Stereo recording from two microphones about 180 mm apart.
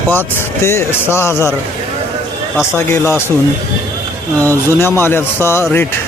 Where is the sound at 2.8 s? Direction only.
15° left (ahead or behind).